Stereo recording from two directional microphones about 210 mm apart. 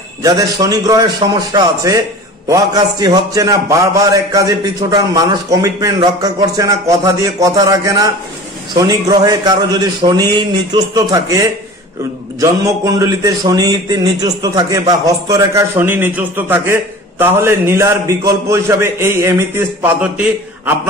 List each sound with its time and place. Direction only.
0.2 s a man's voice: 15° right (ahead or behind)